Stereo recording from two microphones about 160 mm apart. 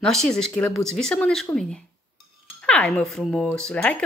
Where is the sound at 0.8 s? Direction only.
5° left (ahead or behind).